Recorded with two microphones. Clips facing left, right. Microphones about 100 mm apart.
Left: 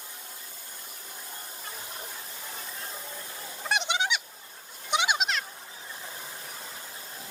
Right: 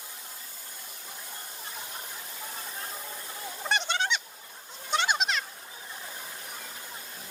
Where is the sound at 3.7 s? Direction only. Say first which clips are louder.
Left 1 dB; 15° left (ahead or behind).